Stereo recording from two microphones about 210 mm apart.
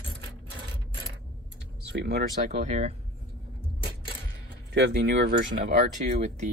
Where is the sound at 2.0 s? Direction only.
50° right (ahead or behind).